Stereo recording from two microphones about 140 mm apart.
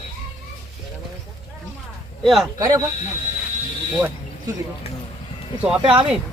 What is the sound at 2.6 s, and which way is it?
Speech, 25° right (ahead or behind).